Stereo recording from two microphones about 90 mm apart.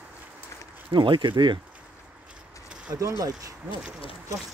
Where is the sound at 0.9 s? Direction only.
65° right (ahead or behind).